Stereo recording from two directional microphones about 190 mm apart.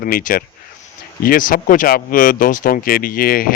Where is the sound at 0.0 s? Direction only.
45° left (ahead or behind).